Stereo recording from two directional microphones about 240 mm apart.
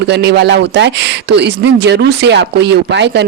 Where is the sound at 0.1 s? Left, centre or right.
Right.